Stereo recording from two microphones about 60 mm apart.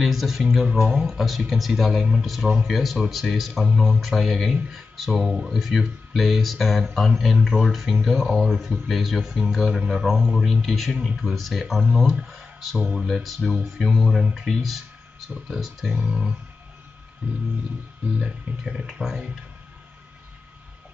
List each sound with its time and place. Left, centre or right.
0.0 s speech: centre
1.0 s speech: centre
3.6 s speech: centre
4.0 s speech: centre
10.2 s speech: centre
11.0 s speech: centre
11.3 s speech: centre
13.4 s speech: centre
13.7 s speech: centre
15.9 s speech: centre
18.2 s speech: centre